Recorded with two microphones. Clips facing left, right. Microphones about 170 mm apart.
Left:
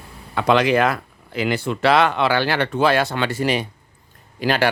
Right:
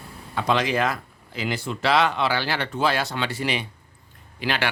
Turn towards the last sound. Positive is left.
turn(degrees=40)  # may be behind; listen again after turning